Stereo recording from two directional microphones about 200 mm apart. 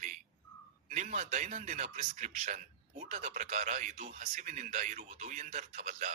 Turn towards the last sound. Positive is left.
turn(degrees=-35)  # may be behind; listen again after turning